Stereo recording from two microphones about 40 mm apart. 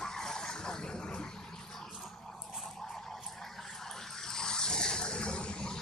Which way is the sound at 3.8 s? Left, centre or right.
Centre.